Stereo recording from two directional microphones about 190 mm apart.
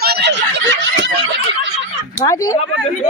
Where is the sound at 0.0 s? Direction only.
60° right (ahead or behind).